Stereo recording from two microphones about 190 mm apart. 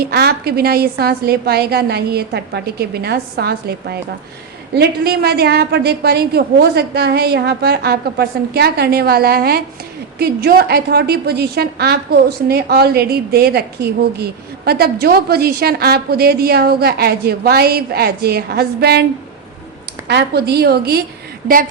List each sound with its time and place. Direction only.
0.0 s a woman's voice: 55° right (ahead or behind)
20.1 s a woman's voice: 60° right (ahead or behind)